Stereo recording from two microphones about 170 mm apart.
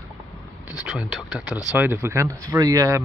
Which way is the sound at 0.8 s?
5° right (ahead or behind).